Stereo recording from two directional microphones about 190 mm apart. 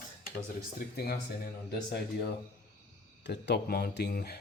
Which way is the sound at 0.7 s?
55° left (ahead or behind).